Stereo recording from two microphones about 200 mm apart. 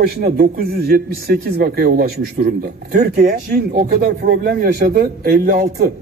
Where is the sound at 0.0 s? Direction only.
50° right (ahead or behind).